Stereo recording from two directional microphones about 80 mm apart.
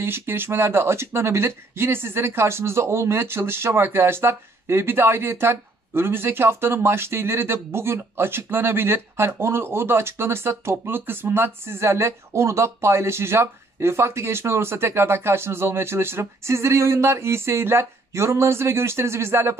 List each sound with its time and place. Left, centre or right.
0.0 s speech: right